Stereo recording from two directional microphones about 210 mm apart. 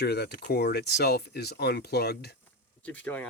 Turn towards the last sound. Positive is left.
turn(degrees=5)  # may be behind; listen again after turning